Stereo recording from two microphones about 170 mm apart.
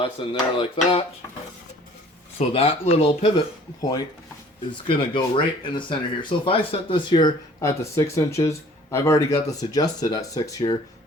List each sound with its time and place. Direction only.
0.2 s speech: 30° left (ahead or behind)
2.4 s speech: 35° left (ahead or behind)